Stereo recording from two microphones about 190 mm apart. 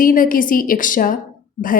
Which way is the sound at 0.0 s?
45° left (ahead or behind).